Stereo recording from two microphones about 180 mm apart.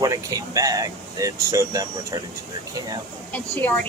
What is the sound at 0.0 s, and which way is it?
Speech, 20° right (ahead or behind).